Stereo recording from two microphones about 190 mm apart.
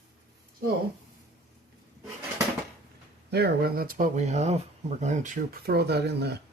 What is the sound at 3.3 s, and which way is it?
Speech, 60° right (ahead or behind).